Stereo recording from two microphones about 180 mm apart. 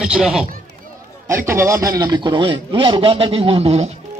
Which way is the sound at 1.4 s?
15° right (ahead or behind).